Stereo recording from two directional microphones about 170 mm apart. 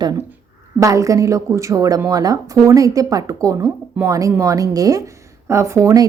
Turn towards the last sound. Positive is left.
turn(degrees=-20)  # may be behind; listen again after turning